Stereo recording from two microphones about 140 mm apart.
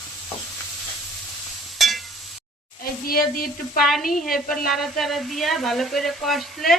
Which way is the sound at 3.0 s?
90° left.